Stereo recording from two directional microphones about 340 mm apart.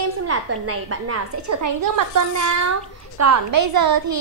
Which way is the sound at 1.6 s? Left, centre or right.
Right.